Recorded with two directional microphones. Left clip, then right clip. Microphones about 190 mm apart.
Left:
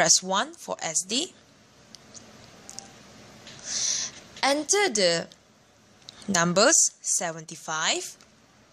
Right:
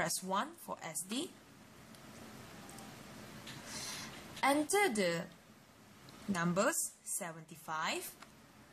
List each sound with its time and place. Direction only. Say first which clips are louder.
0.0 s a woman's voice: left 14 dB; 30° left (ahead or behind)
3.7 s a sound: left 18 dB; 30° left (ahead or behind)
6.3 s a woman's voice: left 14 dB; 40° left (ahead or behind)